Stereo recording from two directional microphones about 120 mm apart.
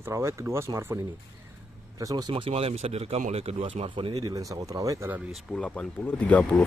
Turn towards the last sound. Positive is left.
turn(degrees=10)  # may be behind; listen again after turning